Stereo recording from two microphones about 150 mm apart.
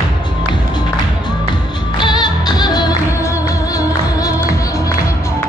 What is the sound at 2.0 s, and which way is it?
Music, 30° left (ahead or behind).